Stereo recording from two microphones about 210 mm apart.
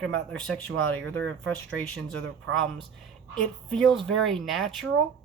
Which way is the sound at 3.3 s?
Centre (ahead or behind).